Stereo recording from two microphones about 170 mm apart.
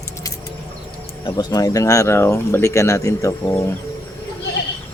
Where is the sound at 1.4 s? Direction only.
25° left (ahead or behind).